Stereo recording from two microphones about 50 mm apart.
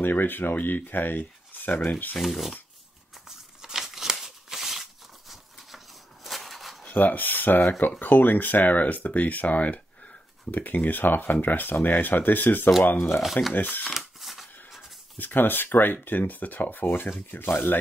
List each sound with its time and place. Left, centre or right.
0.0 s speech: left
2.2 s speech: centre
3.3 s a sound: centre
6.2 s a sound: centre
6.8 s speech: left
13.2 s speech: centre
13.5 s speech: left
13.8 s a sound: centre
15.1 s speech: left